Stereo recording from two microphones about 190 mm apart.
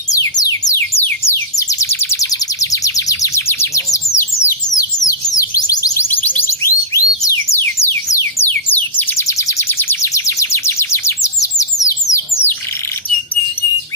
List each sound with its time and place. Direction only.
0.1 s music: 20° left (ahead or behind)
1.0 s a sound: 15° left (ahead or behind)
6.9 s music: 15° left (ahead or behind)